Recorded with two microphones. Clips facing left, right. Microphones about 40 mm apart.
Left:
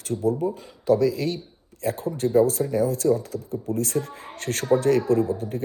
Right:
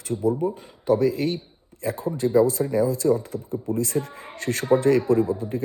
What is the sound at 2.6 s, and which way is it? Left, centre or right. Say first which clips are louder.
Speech: right 1 dB; right.